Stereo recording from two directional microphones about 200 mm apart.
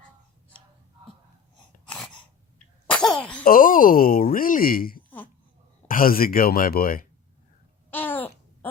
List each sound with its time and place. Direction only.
2.8 s cough: 5° left (ahead or behind)
3.4 s speech: 45° left (ahead or behind)
7.9 s babbling: 10° left (ahead or behind)